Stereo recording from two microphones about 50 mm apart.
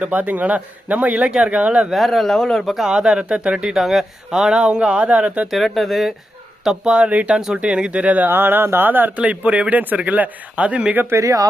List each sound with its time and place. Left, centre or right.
0.0 s speech: right
1.9 s speech: centre
2.9 s speech: centre
3.8 s speech: centre; by 5.5 s right
5.5 s speech: centre
6.8 s speech: centre
7.3 s speech: centre
8.3 s speech: right
11.1 s speech: right